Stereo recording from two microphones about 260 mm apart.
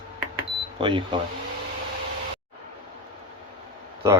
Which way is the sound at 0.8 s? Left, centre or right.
Centre.